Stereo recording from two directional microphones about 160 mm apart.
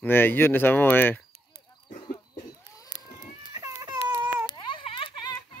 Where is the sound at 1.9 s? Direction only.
50° left (ahead or behind).